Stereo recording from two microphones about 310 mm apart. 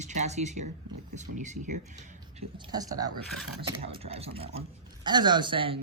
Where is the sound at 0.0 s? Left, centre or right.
Right.